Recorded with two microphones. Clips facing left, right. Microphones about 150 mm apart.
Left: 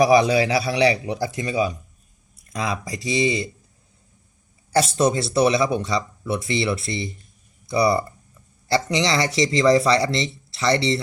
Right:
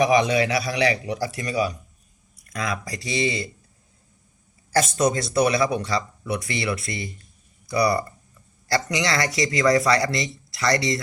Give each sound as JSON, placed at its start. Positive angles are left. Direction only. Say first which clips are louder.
{"t": 0.0, "sound": "speech", "louder": "left 3 dB", "side_deg": 35}
{"t": 4.7, "sound": "speech", "louder": "left 2 dB", "side_deg": 30}